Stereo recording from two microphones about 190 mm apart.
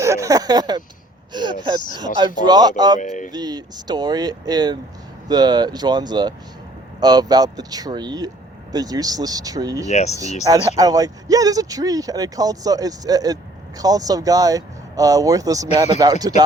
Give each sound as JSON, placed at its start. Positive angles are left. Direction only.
{"t": 0.0, "sound": "speech", "side_deg": -15}
{"t": 3.0, "sound": "speech", "side_deg": 40}
{"t": 3.3, "sound": "speech", "side_deg": -20}
{"t": 9.9, "sound": "speech", "side_deg": 35}
{"t": 10.4, "sound": "speech", "side_deg": -20}